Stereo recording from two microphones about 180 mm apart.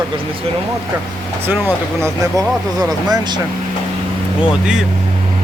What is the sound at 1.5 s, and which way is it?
Speech, 10° right (ahead or behind).